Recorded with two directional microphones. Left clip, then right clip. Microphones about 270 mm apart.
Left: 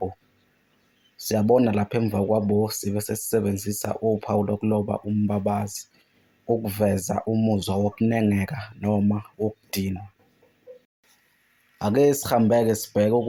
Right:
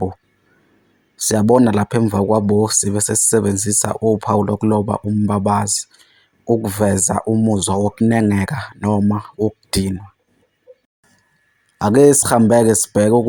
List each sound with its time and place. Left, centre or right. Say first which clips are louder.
1.2 s speech: right 6 dB; right
11.8 s speech: right 9 dB; right